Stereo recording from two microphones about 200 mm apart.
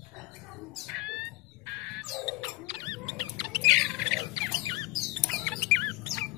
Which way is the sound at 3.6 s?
Centre (ahead or behind).